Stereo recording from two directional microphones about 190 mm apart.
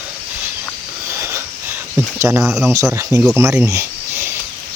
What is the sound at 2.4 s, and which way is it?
Speech, centre (ahead or behind).